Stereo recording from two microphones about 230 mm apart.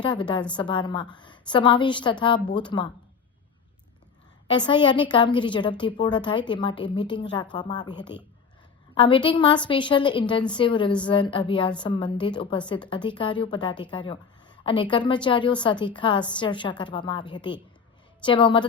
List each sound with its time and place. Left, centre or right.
0.0 s a woman's voice: left
4.5 s a woman's voice: centre